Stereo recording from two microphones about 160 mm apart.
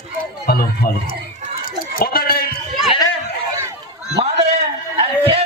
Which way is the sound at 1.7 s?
70° left (ahead or behind).